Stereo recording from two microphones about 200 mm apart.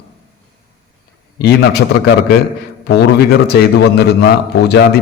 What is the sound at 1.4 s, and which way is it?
Speech, 55° left (ahead or behind).